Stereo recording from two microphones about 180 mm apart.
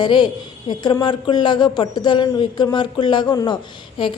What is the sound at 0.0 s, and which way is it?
Speech, 25° left (ahead or behind).